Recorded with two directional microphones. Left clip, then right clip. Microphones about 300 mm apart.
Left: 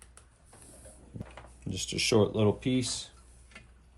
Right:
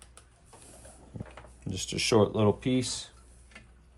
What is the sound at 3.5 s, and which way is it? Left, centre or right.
Tick-tock, centre.